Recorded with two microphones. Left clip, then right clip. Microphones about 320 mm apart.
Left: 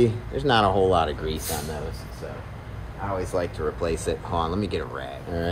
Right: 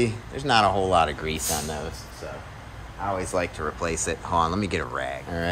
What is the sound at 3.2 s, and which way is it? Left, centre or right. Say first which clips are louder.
Speech: even; right.